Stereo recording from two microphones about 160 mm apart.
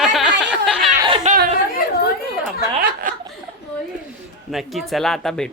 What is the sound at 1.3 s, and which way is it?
Chatter, 50° right (ahead or behind).